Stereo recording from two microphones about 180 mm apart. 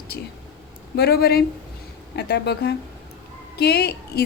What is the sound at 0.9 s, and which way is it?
A woman's voice, 60° left (ahead or behind).